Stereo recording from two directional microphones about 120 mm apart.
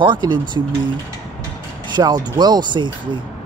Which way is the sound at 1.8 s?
35° right (ahead or behind).